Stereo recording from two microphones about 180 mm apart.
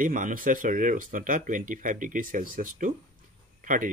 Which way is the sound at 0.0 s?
45° right (ahead or behind).